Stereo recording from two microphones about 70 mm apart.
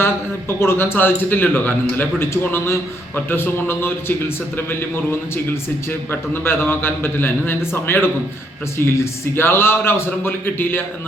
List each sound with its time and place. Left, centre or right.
0.0 s a man's voice: left
5.9 s a man's voice: left